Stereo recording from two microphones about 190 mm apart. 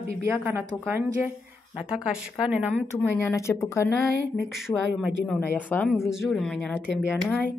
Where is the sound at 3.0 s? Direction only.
10° left (ahead or behind).